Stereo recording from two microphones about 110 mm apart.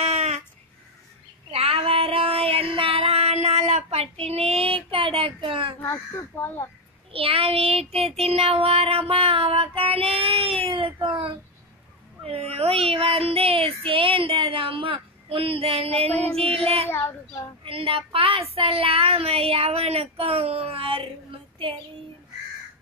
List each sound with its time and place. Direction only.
0.0 s a sound: 80° right
1.5 s child singing: 60° right (ahead or behind)
5.8 s speech: 20° left (ahead or behind)
7.1 s child singing: 60° right (ahead or behind)
12.3 s child singing: 65° right (ahead or behind)
16.8 s speech: 20° left (ahead or behind)
17.6 s child singing: 55° right (ahead or behind)